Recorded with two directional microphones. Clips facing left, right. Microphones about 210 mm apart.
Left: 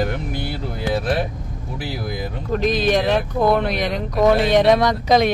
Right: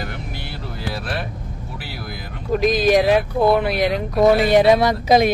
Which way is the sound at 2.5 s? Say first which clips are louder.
Right 3 dB; 10° right (ahead or behind).